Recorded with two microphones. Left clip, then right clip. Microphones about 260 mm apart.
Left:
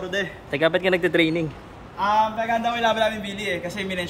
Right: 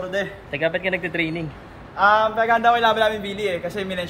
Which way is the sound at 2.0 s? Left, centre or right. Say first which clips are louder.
Right 4 dB; centre.